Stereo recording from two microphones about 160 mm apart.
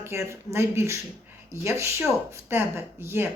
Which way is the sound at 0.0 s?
15° right (ahead or behind).